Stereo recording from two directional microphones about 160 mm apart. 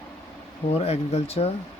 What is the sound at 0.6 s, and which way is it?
Speech, 40° left (ahead or behind).